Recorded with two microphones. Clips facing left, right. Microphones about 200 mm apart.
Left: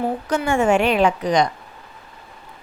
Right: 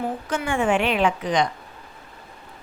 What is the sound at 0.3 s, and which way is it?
A woman's voice, 40° left (ahead or behind).